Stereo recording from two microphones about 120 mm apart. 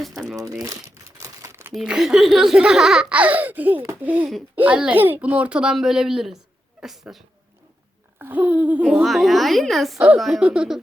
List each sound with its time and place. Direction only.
0.3 s crumpling: 30° right (ahead or behind)
1.7 s speech: 5° right (ahead or behind)
8.2 s speech: 15° right (ahead or behind)